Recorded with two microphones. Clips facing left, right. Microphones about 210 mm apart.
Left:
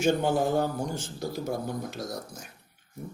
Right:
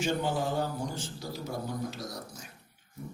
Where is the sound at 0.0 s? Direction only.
50° left (ahead or behind).